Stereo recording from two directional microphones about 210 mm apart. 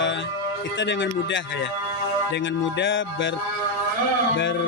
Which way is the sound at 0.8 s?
60° left (ahead or behind).